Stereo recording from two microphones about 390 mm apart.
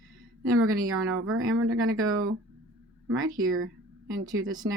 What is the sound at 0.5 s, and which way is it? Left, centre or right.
Speech, right.